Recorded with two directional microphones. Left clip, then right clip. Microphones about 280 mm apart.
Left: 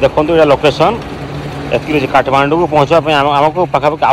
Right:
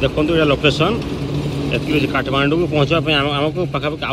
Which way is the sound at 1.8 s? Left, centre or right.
Centre.